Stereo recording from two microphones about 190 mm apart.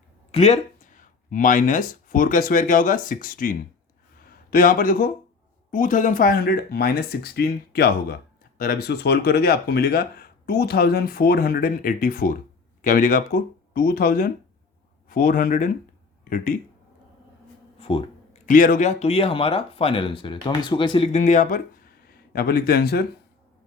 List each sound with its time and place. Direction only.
0.3 s speech: 35° left (ahead or behind)
17.7 s a sound: 30° left (ahead or behind)
18.4 s speech: 45° left (ahead or behind)
22.1 s a man's voice: 55° left (ahead or behind)